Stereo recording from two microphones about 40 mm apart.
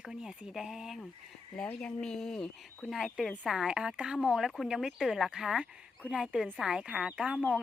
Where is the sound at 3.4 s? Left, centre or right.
Centre.